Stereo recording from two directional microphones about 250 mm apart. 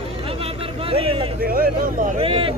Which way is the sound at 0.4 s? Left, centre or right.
Right.